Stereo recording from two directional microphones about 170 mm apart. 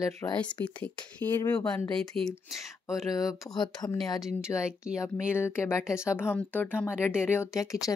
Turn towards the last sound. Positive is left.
turn(degrees=20)  # may be behind; listen again after turning